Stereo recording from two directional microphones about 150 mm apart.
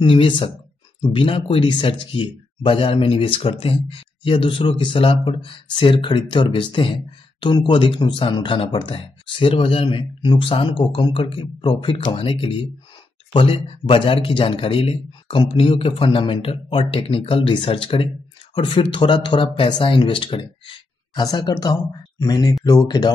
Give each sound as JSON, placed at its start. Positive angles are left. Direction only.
{"t": 0.0, "sound": "speech", "side_deg": 35}